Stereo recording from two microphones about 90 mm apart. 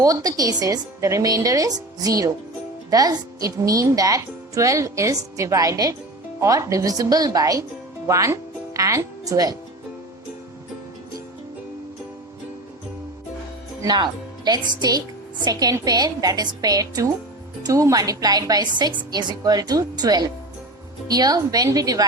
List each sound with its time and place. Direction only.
0.0 s speech: 45° right (ahead or behind)
13.8 s a woman's voice: 50° right (ahead or behind)